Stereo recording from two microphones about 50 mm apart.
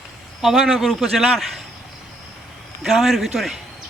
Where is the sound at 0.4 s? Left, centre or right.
Centre.